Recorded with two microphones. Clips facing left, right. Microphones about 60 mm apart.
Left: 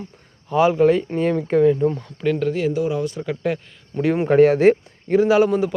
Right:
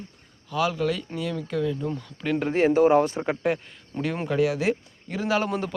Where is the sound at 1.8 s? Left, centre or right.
Centre.